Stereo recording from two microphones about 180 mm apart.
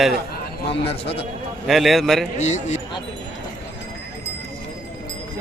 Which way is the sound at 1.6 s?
Centre (ahead or behind).